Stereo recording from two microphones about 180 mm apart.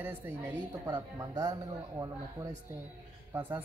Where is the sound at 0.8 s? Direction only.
20° right (ahead or behind).